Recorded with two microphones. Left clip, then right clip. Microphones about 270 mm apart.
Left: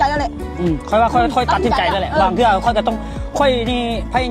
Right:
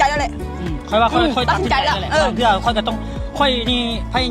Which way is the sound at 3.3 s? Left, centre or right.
Left.